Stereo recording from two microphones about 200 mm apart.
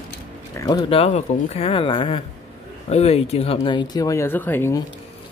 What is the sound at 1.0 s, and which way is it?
Speech, 30° left (ahead or behind).